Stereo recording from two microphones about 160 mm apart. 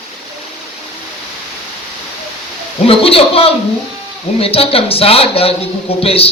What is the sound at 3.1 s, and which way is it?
A man's voice, 35° left (ahead or behind).